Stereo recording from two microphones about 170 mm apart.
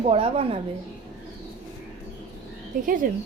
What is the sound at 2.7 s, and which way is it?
Speech, 50° right (ahead or behind).